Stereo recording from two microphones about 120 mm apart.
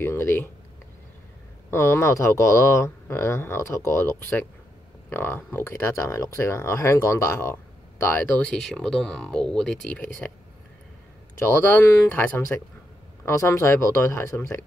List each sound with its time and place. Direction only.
0.0 s speech: 20° left (ahead or behind)
1.7 s speech: 20° left (ahead or behind)
11.3 s speech: 15° left (ahead or behind)